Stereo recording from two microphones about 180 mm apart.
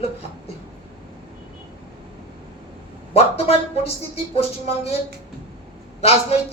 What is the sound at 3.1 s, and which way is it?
Speech, 35° left (ahead or behind).